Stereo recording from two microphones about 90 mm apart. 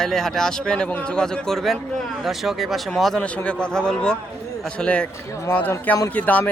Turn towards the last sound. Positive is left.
turn(degrees=15)  # may be behind; listen again after turning